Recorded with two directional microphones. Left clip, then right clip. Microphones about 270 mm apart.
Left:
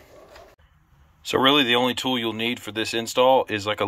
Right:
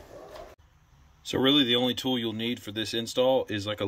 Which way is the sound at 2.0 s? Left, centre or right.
Left.